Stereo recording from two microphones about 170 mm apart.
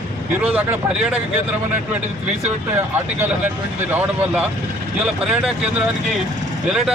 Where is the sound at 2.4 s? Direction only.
10° right (ahead or behind).